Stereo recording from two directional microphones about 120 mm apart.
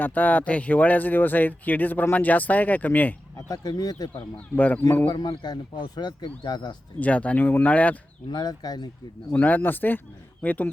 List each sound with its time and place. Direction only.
0.0 s speech: 15° left (ahead or behind)
3.3 s speech: 30° left (ahead or behind)
4.5 s speech: 15° left (ahead or behind)
5.0 s speech: 35° left (ahead or behind)
7.0 s speech: 10° left (ahead or behind)
8.3 s speech: 35° left (ahead or behind)
9.3 s speech: 15° left (ahead or behind)